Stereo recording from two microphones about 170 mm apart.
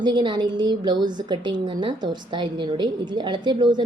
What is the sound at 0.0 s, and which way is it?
A woman's voice, 25° right (ahead or behind).